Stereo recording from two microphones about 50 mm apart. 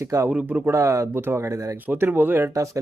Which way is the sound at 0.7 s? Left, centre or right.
Right.